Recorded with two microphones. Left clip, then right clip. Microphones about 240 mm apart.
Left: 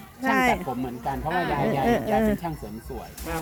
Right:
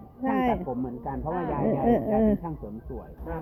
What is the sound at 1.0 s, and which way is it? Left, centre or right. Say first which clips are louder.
Speech: left 5 dB; left.